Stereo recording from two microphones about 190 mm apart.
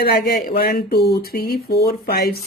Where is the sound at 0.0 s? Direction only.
55° left (ahead or behind).